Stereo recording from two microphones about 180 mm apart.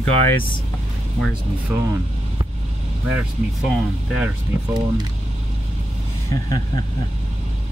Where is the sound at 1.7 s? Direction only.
15° right (ahead or behind).